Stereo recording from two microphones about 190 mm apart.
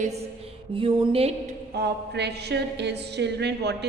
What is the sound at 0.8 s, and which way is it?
Speech, 25° right (ahead or behind).